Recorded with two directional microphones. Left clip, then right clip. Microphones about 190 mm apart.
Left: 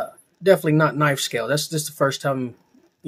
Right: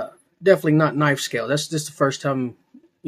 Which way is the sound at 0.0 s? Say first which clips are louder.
Right 1 dB; 10° right (ahead or behind).